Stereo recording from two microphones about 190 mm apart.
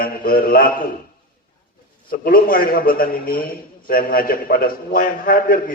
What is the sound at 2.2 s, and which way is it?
A man's voice, 50° left (ahead or behind).